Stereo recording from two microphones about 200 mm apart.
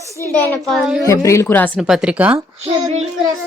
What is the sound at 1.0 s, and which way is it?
Speech, 15° left (ahead or behind).